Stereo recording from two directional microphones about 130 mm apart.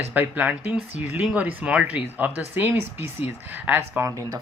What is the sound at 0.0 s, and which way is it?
Speech, 15° right (ahead or behind).